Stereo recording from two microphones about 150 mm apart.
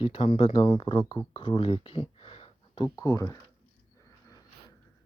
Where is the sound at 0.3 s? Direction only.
35° left (ahead or behind).